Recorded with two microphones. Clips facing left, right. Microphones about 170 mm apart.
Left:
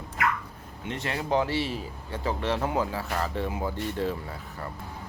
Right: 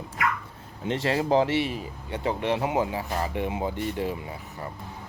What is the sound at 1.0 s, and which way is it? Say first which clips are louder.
Speech: right 4 dB; 30° right (ahead or behind).